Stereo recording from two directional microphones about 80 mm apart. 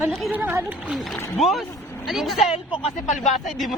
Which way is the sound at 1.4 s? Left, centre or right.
Centre.